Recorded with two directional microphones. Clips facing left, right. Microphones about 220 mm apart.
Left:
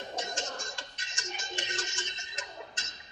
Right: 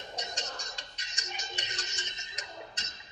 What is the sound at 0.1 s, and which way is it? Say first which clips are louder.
Music: left 3 dB; 50° left (ahead or behind).